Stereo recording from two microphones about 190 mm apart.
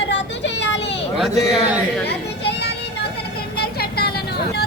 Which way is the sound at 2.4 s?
60° left (ahead or behind).